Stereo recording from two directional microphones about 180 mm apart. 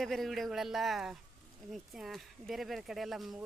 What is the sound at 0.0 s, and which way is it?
Speech, centre (ahead or behind).